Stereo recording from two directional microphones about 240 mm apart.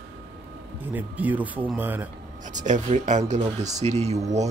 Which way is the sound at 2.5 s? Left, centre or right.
Right.